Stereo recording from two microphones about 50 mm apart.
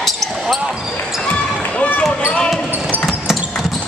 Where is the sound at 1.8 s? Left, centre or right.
Left.